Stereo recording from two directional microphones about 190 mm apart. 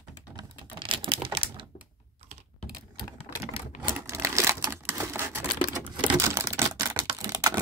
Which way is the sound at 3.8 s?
10° right (ahead or behind).